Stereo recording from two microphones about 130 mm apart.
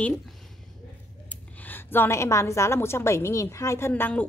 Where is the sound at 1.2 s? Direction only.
15° left (ahead or behind).